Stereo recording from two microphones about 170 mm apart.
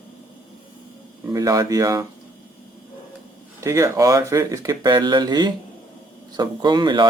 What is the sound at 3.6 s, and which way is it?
Speech, 20° right (ahead or behind).